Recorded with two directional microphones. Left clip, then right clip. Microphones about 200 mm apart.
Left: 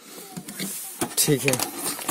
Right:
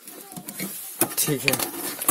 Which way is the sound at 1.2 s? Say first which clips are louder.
Left 7 dB; 30° left (ahead or behind).